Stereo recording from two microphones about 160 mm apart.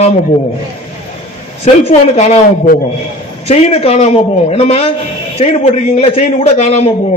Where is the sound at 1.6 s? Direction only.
40° left (ahead or behind).